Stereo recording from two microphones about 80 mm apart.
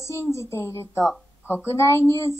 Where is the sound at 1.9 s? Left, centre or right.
Left.